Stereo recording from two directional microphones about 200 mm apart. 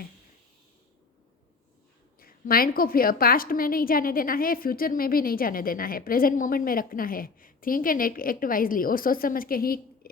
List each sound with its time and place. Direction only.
2.1 s a woman's voice: 45° left (ahead or behind)